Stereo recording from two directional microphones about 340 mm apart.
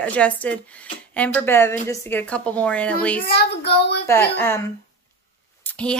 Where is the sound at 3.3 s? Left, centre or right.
Left.